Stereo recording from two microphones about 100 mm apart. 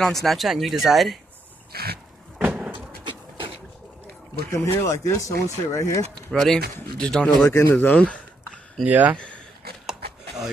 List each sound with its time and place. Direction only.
0.0 s speech: centre (ahead or behind)
2.3 s vehicle: 10° right (ahead or behind)
2.7 s vehicle: 60° right (ahead or behind)
4.5 s speech: 25° left (ahead or behind)
6.1 s speech: 5° left (ahead or behind)
7.4 s speech: 30° left (ahead or behind)
8.8 s speech: 15° right (ahead or behind)